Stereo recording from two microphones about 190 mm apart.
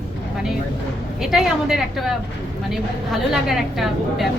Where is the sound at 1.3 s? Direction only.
Centre (ahead or behind).